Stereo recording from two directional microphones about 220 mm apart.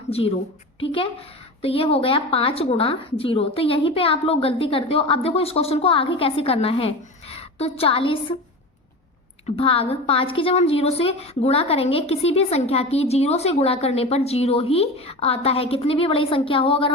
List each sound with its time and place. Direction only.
0.1 s a woman's voice: 25° left (ahead or behind)
9.6 s a woman's voice: 25° left (ahead or behind)